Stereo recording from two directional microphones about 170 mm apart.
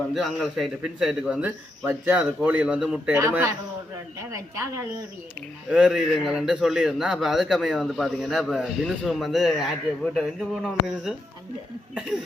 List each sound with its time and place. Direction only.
0.1 s a man's voice: centre (ahead or behind)
3.2 s a woman's voice: 20° right (ahead or behind)
5.7 s a man's voice: 5° right (ahead or behind)